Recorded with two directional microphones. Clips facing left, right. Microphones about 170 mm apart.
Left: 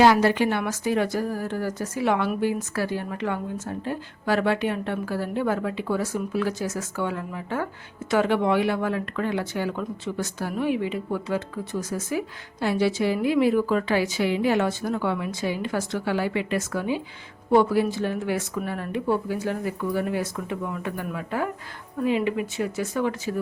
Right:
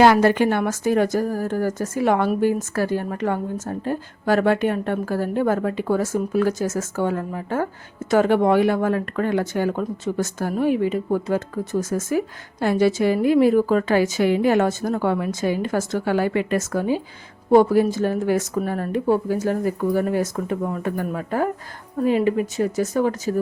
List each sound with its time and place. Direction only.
0.0 s speech: 55° right (ahead or behind)